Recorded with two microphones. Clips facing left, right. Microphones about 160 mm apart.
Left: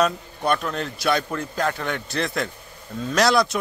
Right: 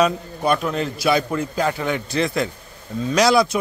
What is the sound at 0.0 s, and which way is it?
Speech, centre (ahead or behind).